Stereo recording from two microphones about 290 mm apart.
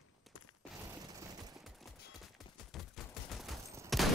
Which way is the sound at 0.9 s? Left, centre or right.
Centre.